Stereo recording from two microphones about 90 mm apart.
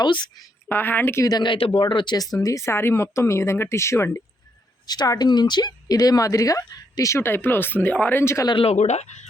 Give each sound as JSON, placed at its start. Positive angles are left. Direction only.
{"t": 0.0, "sound": "speech", "side_deg": 55}
{"t": 0.7, "sound": "speech", "side_deg": 25}
{"t": 1.2, "sound": "speech", "side_deg": 45}
{"t": 1.5, "sound": "speech", "side_deg": 90}
{"t": 2.1, "sound": "speech", "side_deg": 45}
{"t": 4.9, "sound": "speech", "side_deg": 50}
{"t": 7.2, "sound": "speech", "side_deg": 25}